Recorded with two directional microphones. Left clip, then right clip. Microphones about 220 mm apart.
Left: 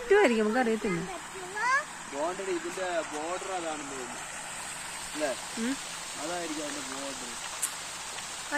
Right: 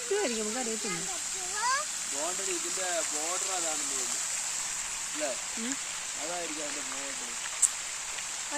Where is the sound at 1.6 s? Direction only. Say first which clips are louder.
Left 3 dB; 35° right (ahead or behind).